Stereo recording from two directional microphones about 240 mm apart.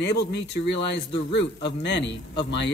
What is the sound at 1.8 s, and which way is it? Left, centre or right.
Speech, left.